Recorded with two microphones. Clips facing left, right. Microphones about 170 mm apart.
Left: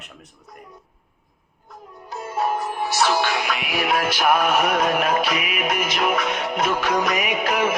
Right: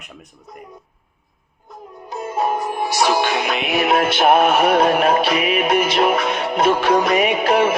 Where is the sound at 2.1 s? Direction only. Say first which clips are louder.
Right 3 dB; 20° right (ahead or behind).